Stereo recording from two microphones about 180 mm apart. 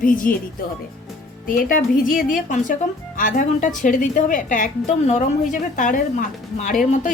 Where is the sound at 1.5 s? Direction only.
50° left (ahead or behind).